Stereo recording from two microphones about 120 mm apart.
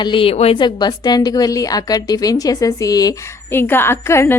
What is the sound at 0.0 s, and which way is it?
Speech, 45° left (ahead or behind).